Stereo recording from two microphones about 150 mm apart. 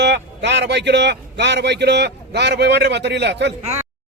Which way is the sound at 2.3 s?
90° right.